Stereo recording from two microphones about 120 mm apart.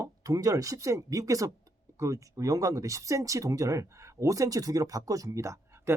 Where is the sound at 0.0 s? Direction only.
30° right (ahead or behind).